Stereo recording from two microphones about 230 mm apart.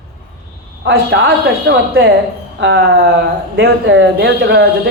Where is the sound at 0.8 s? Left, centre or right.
Right.